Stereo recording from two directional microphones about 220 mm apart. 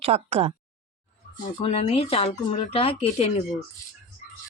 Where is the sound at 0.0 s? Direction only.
30° right (ahead or behind).